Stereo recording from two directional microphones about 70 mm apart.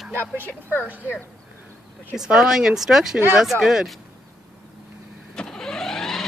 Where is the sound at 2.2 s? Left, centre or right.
Centre.